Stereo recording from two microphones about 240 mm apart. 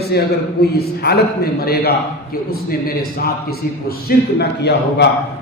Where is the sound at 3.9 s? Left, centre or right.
Left.